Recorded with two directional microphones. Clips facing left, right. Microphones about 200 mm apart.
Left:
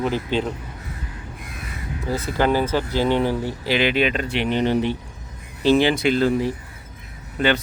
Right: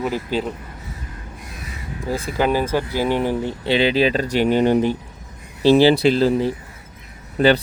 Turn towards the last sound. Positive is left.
turn(degrees=-35)  # may be behind; listen again after turning